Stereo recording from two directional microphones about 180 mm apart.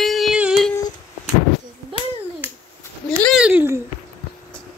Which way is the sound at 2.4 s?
10° right (ahead or behind).